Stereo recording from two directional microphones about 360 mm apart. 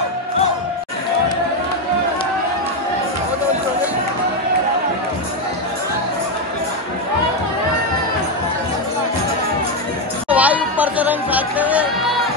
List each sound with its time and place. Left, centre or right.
10.3 s music: centre